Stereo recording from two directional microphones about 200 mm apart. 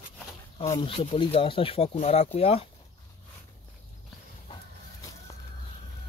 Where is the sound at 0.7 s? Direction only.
30° left (ahead or behind).